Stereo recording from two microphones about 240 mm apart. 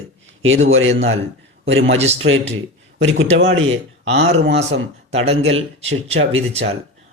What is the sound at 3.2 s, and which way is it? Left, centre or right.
Speech, right.